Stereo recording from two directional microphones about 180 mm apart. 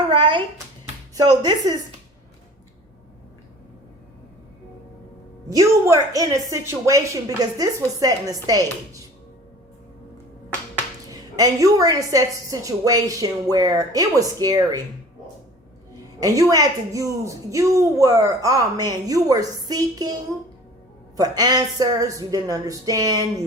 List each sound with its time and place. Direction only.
0.1 s a sound: 25° right (ahead or behind)
1.1 s a woman's voice: 20° right (ahead or behind)
5.5 s a woman's voice: 20° right (ahead or behind)
11.1 s a woman's voice: 20° right (ahead or behind)
16.2 s a woman's voice: 20° right (ahead or behind)
21.2 s a woman's voice: 20° right (ahead or behind)